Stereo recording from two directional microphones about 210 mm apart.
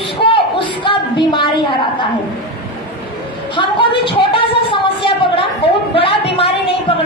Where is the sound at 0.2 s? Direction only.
25° left (ahead or behind).